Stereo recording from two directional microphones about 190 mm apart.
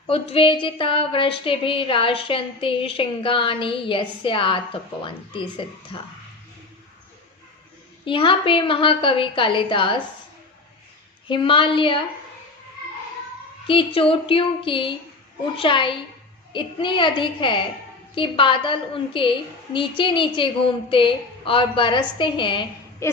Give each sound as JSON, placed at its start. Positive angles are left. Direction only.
{"t": 0.1, "sound": "a woman's voice", "side_deg": 30}
{"t": 8.0, "sound": "a woman's voice", "side_deg": 25}
{"t": 11.3, "sound": "a woman's voice", "side_deg": 25}
{"t": 13.7, "sound": "a woman's voice", "side_deg": 30}